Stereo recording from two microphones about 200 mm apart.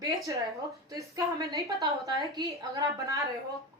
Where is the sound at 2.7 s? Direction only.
15° right (ahead or behind).